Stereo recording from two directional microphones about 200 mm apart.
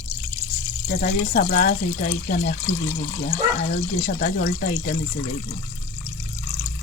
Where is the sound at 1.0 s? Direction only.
45° left (ahead or behind).